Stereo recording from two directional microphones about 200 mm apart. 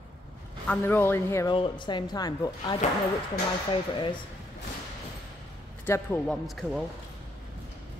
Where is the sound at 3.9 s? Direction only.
25° left (ahead or behind).